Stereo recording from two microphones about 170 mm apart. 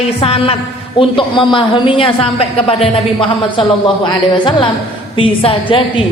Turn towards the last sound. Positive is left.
turn(degrees=30)  # may be behind; listen again after turning